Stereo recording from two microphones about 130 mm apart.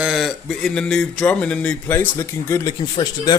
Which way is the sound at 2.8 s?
30° left (ahead or behind).